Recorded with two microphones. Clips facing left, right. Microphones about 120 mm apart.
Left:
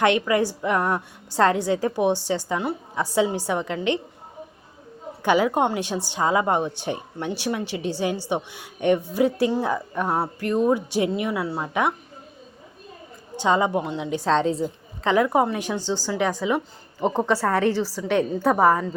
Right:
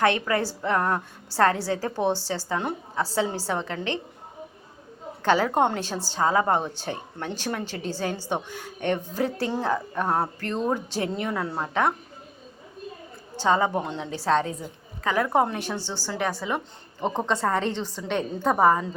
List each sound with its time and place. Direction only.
0.0 s a woman's voice: 15° left (ahead or behind)
5.2 s a woman's voice: 15° left (ahead or behind)
13.3 s a woman's voice: 15° left (ahead or behind)
15.3 s a woman's voice: 5° left (ahead or behind)